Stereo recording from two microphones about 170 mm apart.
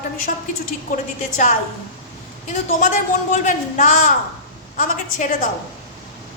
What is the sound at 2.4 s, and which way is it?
A woman's voice, 45° left (ahead or behind).